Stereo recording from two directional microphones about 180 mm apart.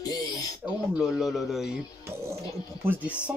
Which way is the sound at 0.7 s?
5° right (ahead or behind).